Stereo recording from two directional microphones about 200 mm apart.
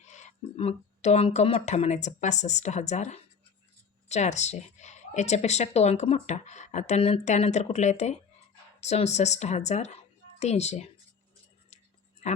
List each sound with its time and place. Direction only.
0.0 s speech: 35° left (ahead or behind)